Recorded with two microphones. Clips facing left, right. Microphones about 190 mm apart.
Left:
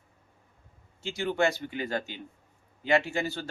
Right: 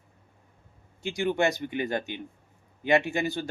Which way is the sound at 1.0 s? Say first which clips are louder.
Right 2 dB; 15° right (ahead or behind).